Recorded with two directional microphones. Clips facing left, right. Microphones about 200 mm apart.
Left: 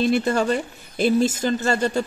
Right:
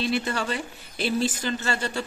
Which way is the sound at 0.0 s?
45° left (ahead or behind).